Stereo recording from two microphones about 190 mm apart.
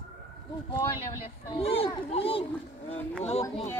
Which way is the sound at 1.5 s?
30° left (ahead or behind).